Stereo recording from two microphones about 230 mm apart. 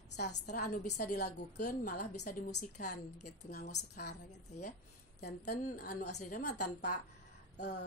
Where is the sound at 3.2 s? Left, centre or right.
Left.